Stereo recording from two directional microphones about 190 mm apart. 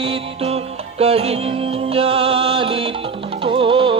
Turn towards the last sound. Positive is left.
turn(degrees=-30)  # may be behind; listen again after turning